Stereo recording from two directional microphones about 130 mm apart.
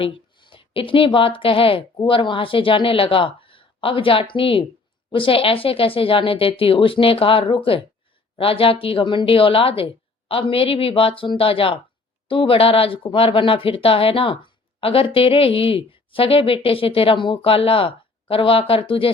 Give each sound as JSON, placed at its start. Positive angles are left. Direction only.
{"t": 0.0, "sound": "a woman's voice", "side_deg": 45}